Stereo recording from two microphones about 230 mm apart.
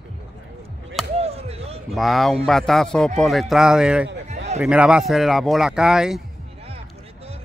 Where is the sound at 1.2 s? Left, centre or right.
Right.